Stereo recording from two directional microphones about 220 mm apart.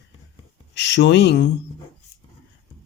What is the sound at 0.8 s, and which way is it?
Speech, 55° left (ahead or behind).